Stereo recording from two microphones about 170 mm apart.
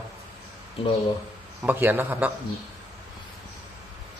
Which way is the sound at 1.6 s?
10° right (ahead or behind).